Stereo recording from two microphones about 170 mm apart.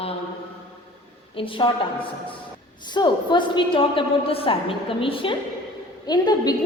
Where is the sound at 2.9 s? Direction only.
25° left (ahead or behind).